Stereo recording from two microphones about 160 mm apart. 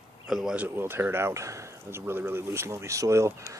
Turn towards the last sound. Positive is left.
turn(degrees=-20)  # may be behind; listen again after turning